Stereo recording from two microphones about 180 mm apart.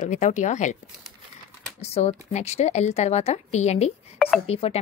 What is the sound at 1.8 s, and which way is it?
A woman's voice, 35° left (ahead or behind).